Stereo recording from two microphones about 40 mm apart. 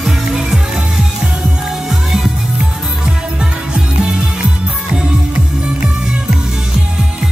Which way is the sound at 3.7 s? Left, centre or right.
Right.